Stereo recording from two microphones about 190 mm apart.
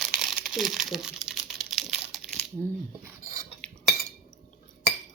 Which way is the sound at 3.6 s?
5° left (ahead or behind).